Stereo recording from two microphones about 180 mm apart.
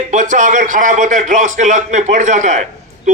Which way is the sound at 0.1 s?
45° right (ahead or behind).